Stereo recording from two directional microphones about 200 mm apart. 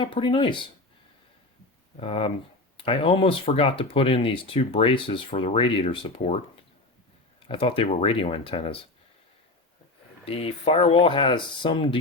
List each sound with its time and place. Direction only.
0.0 s speech: 25° left (ahead or behind)
2.0 s speech: 30° left (ahead or behind)
10.2 s speech: 30° left (ahead or behind)